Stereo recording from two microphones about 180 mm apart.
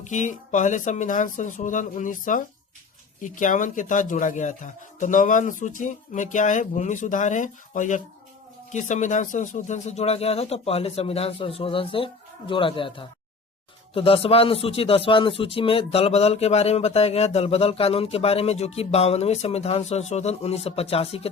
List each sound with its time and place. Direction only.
0.0 s a man's voice: 40° left (ahead or behind)